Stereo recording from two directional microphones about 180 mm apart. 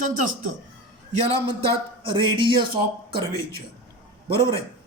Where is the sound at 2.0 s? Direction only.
25° right (ahead or behind).